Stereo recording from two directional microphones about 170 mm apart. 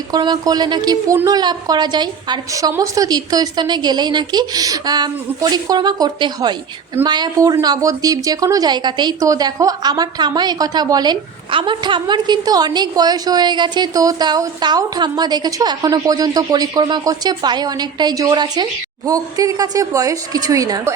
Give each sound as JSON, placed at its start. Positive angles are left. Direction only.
{"t": 0.1, "sound": "a woman's voice", "side_deg": -25}